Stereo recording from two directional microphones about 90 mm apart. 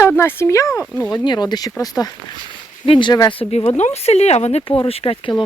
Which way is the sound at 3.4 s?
90° left.